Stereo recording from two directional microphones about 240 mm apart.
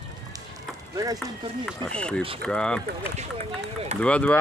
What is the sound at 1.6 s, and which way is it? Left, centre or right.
Speech, centre.